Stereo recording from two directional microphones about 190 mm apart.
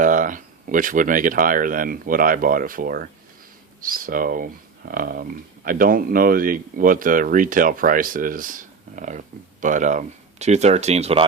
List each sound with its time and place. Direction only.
0.0 s speech: 45° right (ahead or behind)